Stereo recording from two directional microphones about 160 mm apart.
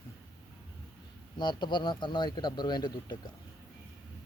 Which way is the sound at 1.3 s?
30° left (ahead or behind).